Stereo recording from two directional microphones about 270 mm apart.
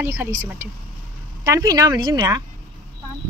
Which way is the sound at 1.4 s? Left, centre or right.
Centre.